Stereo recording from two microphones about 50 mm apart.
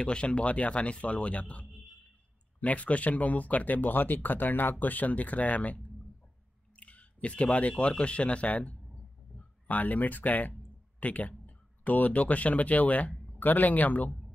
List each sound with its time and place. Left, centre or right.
0.0 s speech: left